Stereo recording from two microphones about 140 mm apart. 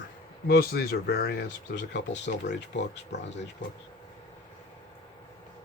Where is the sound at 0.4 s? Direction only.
90° left.